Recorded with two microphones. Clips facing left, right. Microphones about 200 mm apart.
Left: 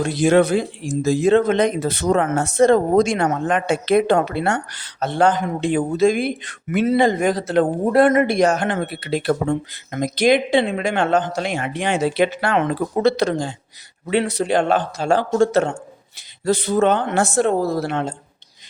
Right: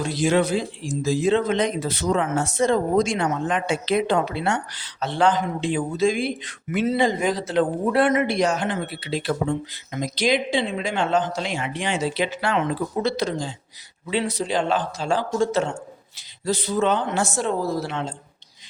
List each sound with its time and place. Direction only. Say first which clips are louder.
0.0 s a woman's voice: left 5 dB; 55° left (ahead or behind)